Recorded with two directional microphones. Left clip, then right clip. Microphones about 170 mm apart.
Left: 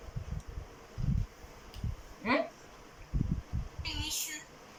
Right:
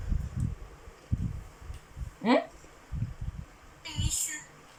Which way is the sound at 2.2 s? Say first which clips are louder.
Right 5 dB; 25° right (ahead or behind).